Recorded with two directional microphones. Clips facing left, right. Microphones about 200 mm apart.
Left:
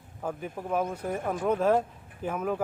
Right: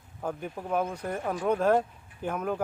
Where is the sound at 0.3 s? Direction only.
5° left (ahead or behind).